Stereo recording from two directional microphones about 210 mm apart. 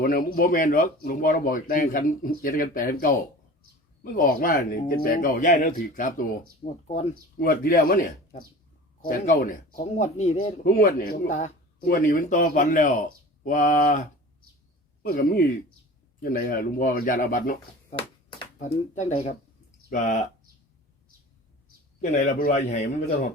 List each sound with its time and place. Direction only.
0.0 s speech: 45° left (ahead or behind)
15.0 s speech: 45° left (ahead or behind)
18.6 s speech: 35° left (ahead or behind)
22.0 s speech: 35° left (ahead or behind)